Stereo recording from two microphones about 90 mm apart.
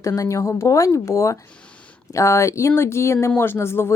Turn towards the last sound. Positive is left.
turn(degrees=30)  # may be behind; listen again after turning